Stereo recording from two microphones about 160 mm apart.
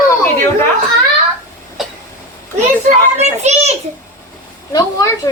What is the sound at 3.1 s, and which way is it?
Speech, 45° right (ahead or behind).